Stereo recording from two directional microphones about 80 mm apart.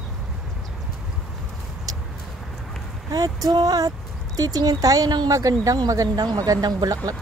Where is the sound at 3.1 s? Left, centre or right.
Right.